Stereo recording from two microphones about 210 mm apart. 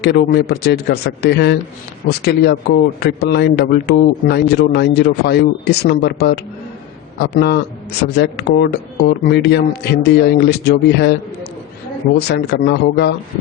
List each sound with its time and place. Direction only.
0.0 s speech: 50° left (ahead or behind)
12.3 s speech: 50° left (ahead or behind)